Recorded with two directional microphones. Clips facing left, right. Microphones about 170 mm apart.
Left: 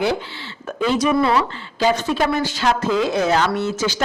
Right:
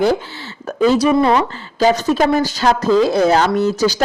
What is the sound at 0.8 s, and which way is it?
Speech, 35° right (ahead or behind).